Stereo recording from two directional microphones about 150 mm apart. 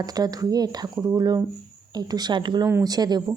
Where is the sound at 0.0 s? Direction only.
25° right (ahead or behind).